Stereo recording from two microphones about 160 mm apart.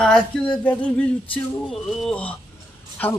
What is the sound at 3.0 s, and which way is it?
Goat, 10° left (ahead or behind).